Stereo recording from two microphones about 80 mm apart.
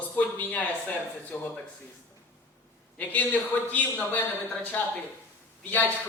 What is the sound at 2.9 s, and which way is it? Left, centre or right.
A man's voice, centre.